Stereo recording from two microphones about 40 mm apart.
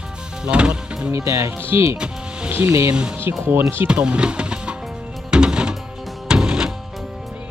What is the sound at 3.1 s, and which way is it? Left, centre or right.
Speech, right.